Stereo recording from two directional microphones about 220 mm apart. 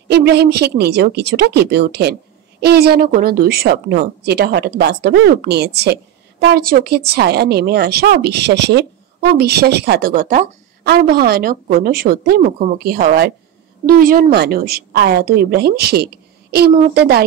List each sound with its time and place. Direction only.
0.1 s a woman's voice: 50° right (ahead or behind)